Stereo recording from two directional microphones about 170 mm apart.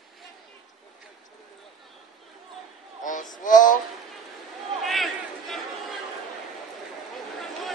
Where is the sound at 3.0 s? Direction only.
50° left (ahead or behind).